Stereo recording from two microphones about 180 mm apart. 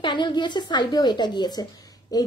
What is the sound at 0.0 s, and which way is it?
A woman's voice, 25° left (ahead or behind).